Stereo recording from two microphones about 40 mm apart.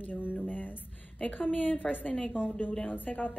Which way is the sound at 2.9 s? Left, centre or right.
Left.